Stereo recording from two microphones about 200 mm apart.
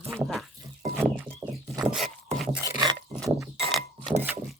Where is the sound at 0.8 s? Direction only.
10° right (ahead or behind).